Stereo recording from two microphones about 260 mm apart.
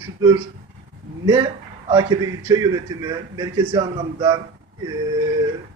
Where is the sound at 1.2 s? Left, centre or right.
Centre.